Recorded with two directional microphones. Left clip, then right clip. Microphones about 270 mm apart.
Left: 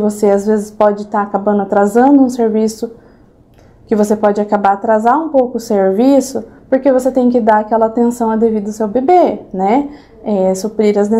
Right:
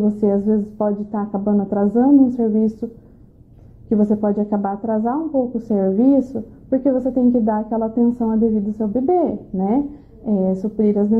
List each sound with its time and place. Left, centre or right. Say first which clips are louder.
0.0 s a woman's voice: left 7 dB; centre
2.3 s a woman's voice: left 6 dB; centre
3.9 s a woman's voice: left 7 dB; centre
5.3 s a woman's voice: left 8 dB; left
5.8 s a woman's voice: left 6 dB; centre
7.2 s a woman's voice: left 6 dB; left
7.4 s a woman's voice: left 10 dB; centre